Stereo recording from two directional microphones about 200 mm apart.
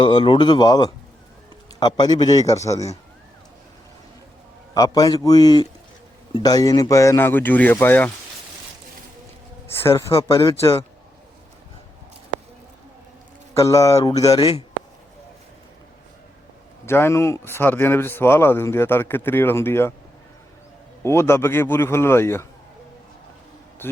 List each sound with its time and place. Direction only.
0.0 s a man's voice: 25° left (ahead or behind)
4.7 s a man's voice: 20° left (ahead or behind)
9.8 s speech: 15° left (ahead or behind)
13.5 s a man's voice: 15° left (ahead or behind)
16.8 s speech: 10° left (ahead or behind)
21.0 s speech: 15° left (ahead or behind)